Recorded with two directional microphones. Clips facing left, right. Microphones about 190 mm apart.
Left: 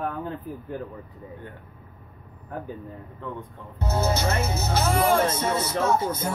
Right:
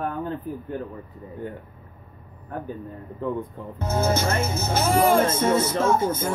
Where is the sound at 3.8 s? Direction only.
50° right (ahead or behind).